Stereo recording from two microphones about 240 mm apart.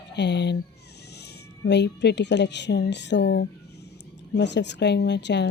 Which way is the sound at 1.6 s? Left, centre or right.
Left.